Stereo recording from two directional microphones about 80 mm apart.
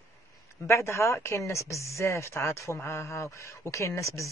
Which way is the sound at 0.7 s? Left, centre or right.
Left.